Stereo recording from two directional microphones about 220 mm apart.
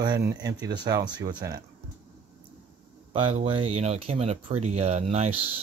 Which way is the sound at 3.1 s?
25° right (ahead or behind).